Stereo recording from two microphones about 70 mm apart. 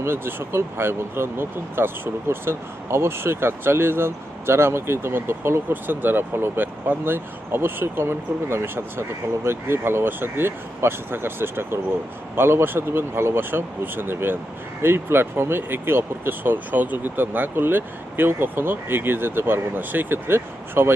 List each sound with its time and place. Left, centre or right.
0.0 s speech: right